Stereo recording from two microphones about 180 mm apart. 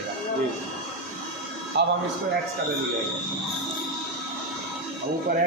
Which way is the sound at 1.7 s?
70° right (ahead or behind).